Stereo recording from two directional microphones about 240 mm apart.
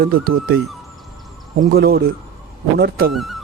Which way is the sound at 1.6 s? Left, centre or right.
Right.